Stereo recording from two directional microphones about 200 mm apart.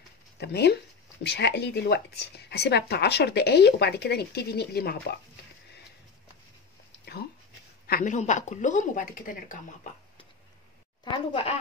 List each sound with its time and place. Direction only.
0.4 s speech: 55° left (ahead or behind)
7.8 s speech: 45° left (ahead or behind)
11.1 s speech: 25° left (ahead or behind)